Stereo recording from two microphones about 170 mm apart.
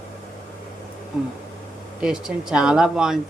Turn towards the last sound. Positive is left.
turn(degrees=-5)  # may be behind; listen again after turning